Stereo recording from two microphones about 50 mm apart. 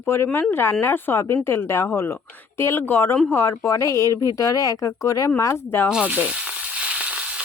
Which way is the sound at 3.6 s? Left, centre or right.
Left.